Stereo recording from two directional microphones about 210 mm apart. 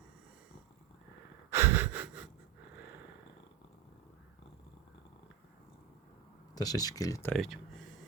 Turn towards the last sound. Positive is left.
turn(degrees=0)  # may be behind; listen again after turning